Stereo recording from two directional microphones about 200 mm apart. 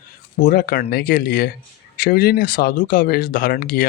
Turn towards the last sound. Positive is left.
turn(degrees=45)  # may be behind; listen again after turning